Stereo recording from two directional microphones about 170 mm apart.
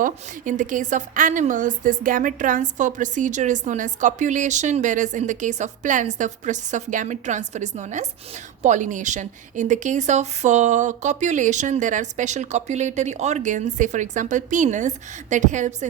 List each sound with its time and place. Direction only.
0.0 s a woman's voice: 50° right (ahead or behind)